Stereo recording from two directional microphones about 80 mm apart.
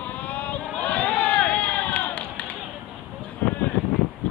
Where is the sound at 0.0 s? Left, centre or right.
Centre.